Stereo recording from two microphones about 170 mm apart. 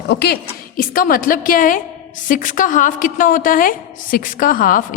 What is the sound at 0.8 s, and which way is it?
A woman's voice, 55° left (ahead or behind).